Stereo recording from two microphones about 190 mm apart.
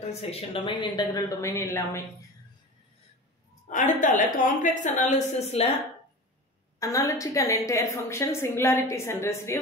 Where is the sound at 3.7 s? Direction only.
40° left (ahead or behind).